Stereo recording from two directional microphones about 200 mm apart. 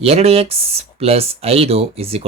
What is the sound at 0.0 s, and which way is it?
Speech, 30° right (ahead or behind).